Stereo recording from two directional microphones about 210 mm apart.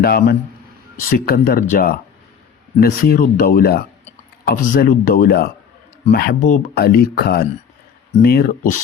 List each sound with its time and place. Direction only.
0.0 s speech: 45° left (ahead or behind)